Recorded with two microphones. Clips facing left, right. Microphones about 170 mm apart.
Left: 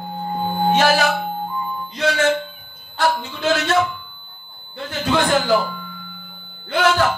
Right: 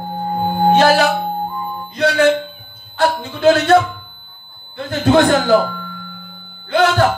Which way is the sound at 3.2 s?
55° right (ahead or behind).